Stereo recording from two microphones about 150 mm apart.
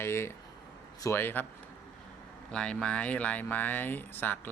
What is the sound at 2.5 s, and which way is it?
Speech, 5° left (ahead or behind).